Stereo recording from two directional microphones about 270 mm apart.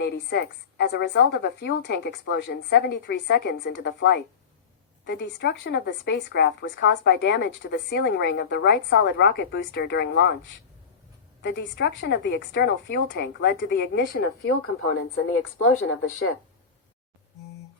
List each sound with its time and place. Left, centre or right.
0.0 s speech: left